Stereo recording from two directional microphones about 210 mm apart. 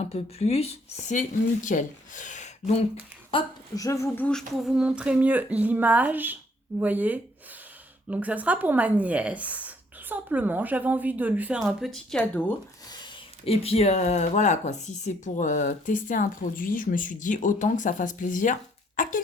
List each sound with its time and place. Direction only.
0.0 s speech: 30° left (ahead or behind)
3.8 s a woman's voice: 15° left (ahead or behind)
12.9 s speech: 25° left (ahead or behind)
19.0 s a sound: 40° left (ahead or behind)